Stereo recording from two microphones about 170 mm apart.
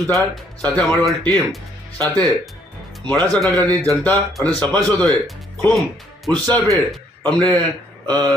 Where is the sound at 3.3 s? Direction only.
10° left (ahead or behind).